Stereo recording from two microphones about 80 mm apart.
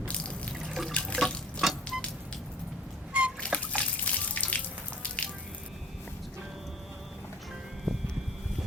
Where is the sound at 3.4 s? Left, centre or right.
Centre.